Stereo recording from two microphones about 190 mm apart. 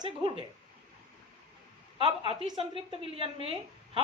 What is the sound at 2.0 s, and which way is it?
A woman's voice, 30° right (ahead or behind).